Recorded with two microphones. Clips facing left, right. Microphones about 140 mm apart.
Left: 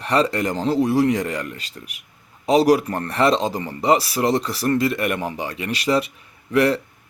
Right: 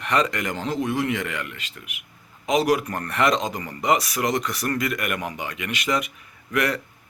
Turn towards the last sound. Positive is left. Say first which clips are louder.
# left 6 dB
turn(degrees=30)  # may be behind; listen again after turning